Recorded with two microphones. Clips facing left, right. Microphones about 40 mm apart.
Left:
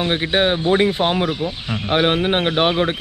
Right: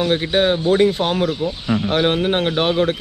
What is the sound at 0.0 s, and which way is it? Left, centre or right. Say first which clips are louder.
Speech: right 1 dB; left.